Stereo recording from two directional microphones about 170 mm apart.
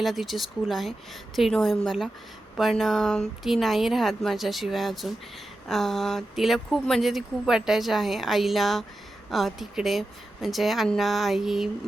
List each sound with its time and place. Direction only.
0.0 s speech: centre (ahead or behind)